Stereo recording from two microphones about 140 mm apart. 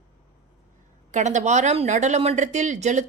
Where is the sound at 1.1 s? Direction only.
60° right (ahead or behind).